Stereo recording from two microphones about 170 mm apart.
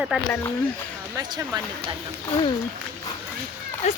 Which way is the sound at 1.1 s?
20° right (ahead or behind).